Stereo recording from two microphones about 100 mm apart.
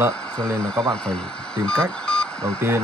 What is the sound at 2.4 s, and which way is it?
Speech, 25° right (ahead or behind).